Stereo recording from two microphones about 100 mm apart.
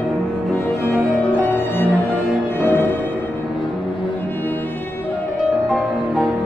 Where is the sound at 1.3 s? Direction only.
20° left (ahead or behind).